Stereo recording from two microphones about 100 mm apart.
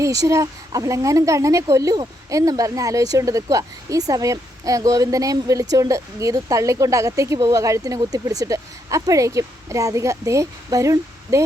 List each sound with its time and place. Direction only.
0.0 s speech: 35° right (ahead or behind)